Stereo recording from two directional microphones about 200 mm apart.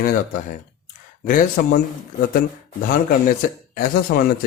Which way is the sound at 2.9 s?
45° left (ahead or behind).